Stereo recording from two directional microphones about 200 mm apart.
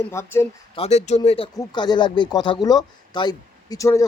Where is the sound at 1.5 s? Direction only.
20° left (ahead or behind).